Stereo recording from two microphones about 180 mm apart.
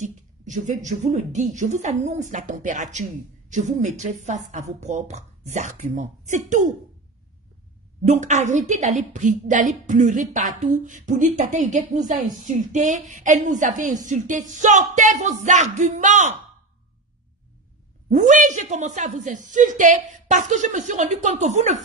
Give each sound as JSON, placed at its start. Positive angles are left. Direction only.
{"t": 0.0, "sound": "a woman's voice", "side_deg": -45}
{"t": 8.1, "sound": "a woman's voice", "side_deg": -40}
{"t": 18.1, "sound": "a woman's voice", "side_deg": -45}